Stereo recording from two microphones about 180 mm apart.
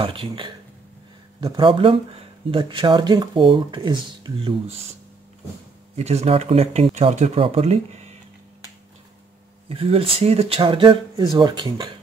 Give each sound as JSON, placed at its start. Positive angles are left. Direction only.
{"t": 0.0, "sound": "speech", "side_deg": -30}
{"t": 5.9, "sound": "speech", "side_deg": -35}
{"t": 9.7, "sound": "speech", "side_deg": -30}